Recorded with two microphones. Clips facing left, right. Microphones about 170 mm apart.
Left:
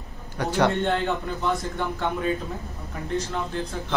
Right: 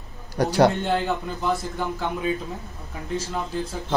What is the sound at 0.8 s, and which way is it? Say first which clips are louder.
Speech: even; centre (ahead or behind).